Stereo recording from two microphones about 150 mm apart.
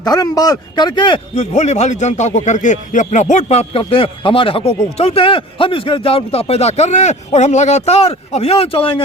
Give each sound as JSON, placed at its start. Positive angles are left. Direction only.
{"t": 0.0, "sound": "speech", "side_deg": 25}
{"t": 1.4, "sound": "a man's voice", "side_deg": 50}